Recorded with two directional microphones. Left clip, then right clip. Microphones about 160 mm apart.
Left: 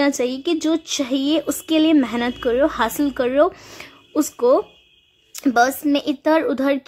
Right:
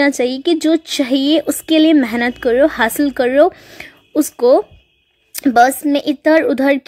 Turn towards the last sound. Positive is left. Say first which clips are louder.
# right 6 dB
turn(degrees=-25)  # may be behind; listen again after turning